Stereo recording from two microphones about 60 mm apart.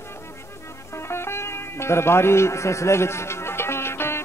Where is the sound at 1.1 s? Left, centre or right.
Left.